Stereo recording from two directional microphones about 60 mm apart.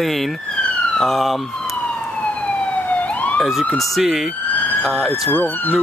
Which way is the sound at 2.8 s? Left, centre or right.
Left.